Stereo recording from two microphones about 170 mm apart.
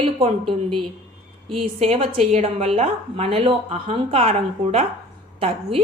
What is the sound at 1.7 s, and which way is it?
A woman's voice, 40° right (ahead or behind).